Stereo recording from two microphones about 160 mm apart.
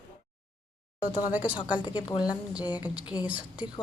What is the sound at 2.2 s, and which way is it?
A woman's voice, 10° right (ahead or behind).